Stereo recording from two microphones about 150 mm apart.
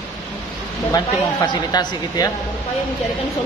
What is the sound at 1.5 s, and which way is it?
Speech, 25° left (ahead or behind).